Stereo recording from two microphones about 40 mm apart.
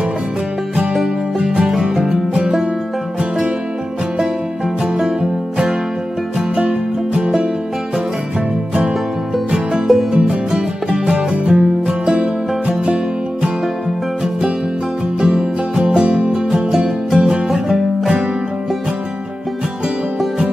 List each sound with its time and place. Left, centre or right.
1.4 s music: right
1.7 s music: centre
3.2 s music: centre
6.3 s music: centre
9.5 s music: centre
10.1 s music: right
10.5 s music: centre
11.4 s music: right
15.1 s music: centre